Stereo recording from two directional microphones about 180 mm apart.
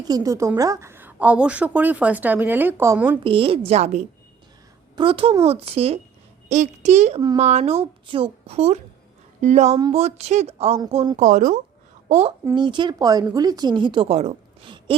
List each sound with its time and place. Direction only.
0.0 s a woman's voice: 20° right (ahead or behind)
3.2 s a woman's voice: 30° right (ahead or behind)
12.5 s a woman's voice: 25° right (ahead or behind)